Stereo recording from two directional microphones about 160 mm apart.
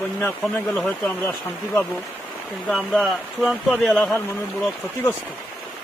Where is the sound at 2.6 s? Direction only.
Centre (ahead or behind).